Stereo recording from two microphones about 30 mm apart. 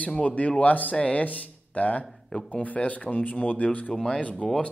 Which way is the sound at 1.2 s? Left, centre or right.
Left.